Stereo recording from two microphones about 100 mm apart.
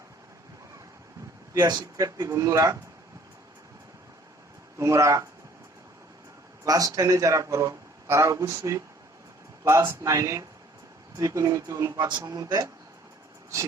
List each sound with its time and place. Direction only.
1.5 s a man's voice: 45° right (ahead or behind)
2.0 s speech: 35° right (ahead or behind)
4.8 s speech: 30° right (ahead or behind)
6.7 s speech: 35° right (ahead or behind)
11.9 s a man's voice: 50° right (ahead or behind)
12.2 s speech: 35° right (ahead or behind)